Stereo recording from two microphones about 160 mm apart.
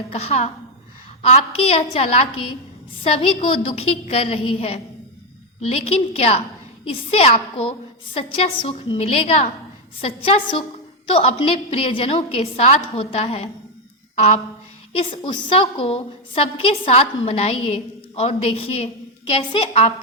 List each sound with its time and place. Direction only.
0.1 s a woman's voice: 40° left (ahead or behind)